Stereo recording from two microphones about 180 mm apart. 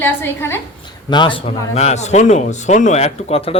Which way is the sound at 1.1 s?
25° left (ahead or behind).